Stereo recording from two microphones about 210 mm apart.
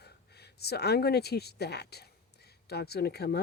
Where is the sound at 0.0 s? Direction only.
50° left (ahead or behind).